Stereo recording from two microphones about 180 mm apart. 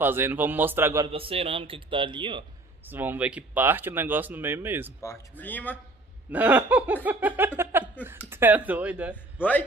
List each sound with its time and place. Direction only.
0.0 s speech: 10° right (ahead or behind)
1.1 s speech: 30° right (ahead or behind)
2.8 s speech: 10° right (ahead or behind)
5.0 s speech: 15° left (ahead or behind)
6.3 s speech: 10° right (ahead or behind)
9.1 s a man's voice: 10° left (ahead or behind)